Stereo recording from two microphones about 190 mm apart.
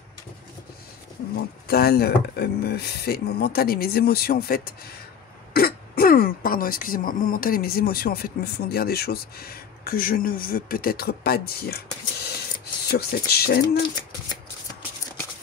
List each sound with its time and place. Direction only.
1.7 s speech: 55° left (ahead or behind)